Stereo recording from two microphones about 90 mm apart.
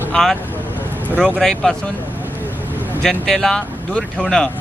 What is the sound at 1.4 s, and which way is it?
Speech, 5° left (ahead or behind).